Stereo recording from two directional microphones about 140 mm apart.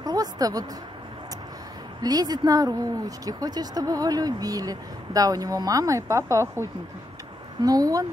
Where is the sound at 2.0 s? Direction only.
25° right (ahead or behind).